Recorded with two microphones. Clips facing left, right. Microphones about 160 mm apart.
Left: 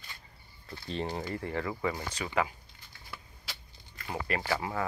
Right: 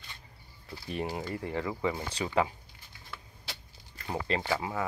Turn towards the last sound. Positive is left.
turn(degrees=-15)  # may be behind; listen again after turning